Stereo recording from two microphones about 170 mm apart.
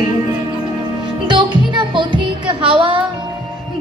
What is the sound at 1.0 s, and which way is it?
Music, 30° right (ahead or behind).